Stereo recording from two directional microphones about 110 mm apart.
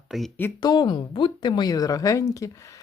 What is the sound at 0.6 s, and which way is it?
Speech, 45° left (ahead or behind).